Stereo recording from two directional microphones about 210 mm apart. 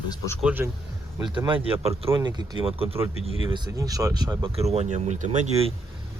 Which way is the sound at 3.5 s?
20° right (ahead or behind).